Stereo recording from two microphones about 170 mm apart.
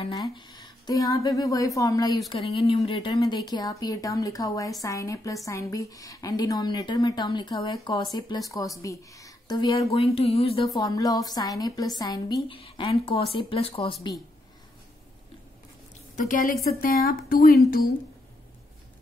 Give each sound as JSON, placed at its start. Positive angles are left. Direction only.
{"t": 0.4, "sound": "speech", "side_deg": 25}
{"t": 2.3, "sound": "speech", "side_deg": 30}
{"t": 10.7, "sound": "speech", "side_deg": 20}
{"t": 16.2, "sound": "a woman's voice", "side_deg": 50}